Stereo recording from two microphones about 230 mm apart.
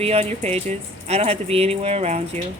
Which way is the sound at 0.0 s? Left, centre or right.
Right.